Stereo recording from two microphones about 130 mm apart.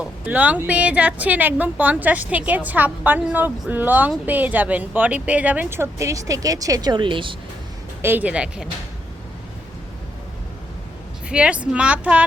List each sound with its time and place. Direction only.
0.0 s a woman's voice: 10° right (ahead or behind); by 7.3 s 40° right (ahead or behind)
8.0 s speech: 15° right (ahead or behind)
11.3 s speech: 10° right (ahead or behind)